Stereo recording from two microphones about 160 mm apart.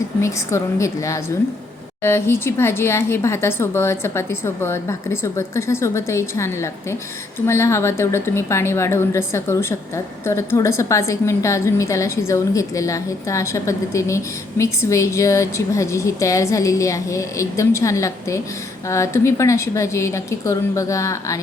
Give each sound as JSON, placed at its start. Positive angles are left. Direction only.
{"t": 0.2, "sound": "a woman's voice", "side_deg": 20}